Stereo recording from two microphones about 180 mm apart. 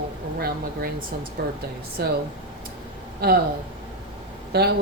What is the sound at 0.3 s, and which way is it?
Speech, 60° right (ahead or behind).